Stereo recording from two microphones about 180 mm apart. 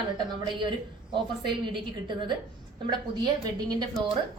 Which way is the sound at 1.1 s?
25° right (ahead or behind).